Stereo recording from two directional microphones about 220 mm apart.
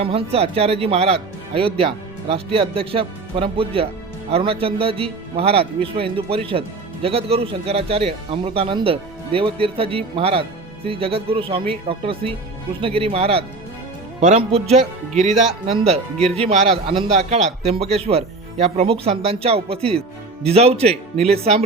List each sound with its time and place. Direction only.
0.0 s a man's voice: 25° right (ahead or behind)
15.1 s speech: centre (ahead or behind)
15.6 s a man's voice: 25° right (ahead or behind)